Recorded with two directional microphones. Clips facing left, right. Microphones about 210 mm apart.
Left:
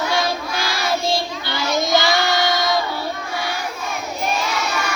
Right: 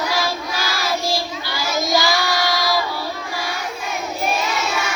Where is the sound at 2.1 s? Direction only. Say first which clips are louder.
Left 2 dB; centre (ahead or behind).